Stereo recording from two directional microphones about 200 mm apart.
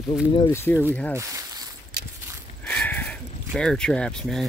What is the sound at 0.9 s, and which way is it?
Speech, 5° left (ahead or behind).